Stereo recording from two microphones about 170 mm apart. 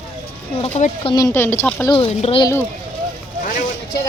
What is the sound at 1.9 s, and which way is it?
Speech, 35° left (ahead or behind).